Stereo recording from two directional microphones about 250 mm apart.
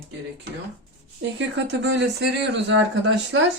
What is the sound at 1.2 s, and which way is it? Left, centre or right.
Speech, right.